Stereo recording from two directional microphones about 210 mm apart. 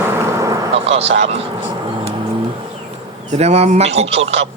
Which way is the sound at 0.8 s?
30° right (ahead or behind).